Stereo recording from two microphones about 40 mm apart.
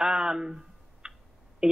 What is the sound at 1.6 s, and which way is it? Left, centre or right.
Speech, right.